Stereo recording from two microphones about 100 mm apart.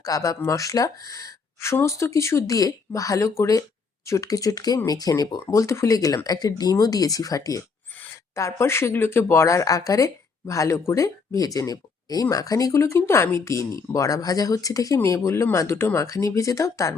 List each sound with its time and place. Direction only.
0.0 s speech: 35° left (ahead or behind)